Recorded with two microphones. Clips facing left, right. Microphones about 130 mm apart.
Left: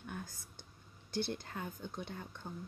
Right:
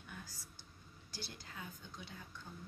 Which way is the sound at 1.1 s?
55° left (ahead or behind).